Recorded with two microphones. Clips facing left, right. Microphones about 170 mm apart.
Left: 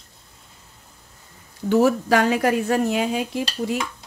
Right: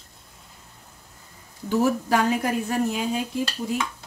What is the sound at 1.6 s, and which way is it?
Speech, 85° left.